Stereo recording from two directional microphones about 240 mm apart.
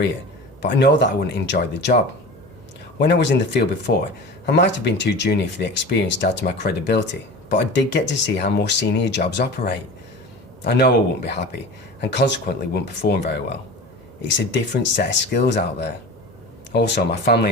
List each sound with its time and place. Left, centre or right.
0.8 s speech: left
3.0 s speech: left